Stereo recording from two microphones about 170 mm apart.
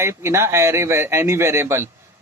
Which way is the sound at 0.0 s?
15° right (ahead or behind).